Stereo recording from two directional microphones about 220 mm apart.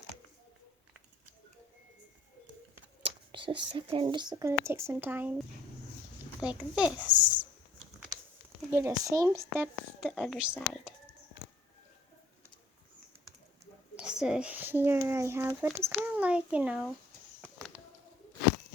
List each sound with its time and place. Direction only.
3.0 s speech: 25° right (ahead or behind)
6.4 s speech: 5° right (ahead or behind)
8.7 s speech: 15° right (ahead or behind)
13.9 s speech: 5° right (ahead or behind)